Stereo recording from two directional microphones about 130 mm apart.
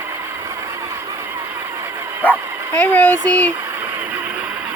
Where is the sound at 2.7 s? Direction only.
10° left (ahead or behind).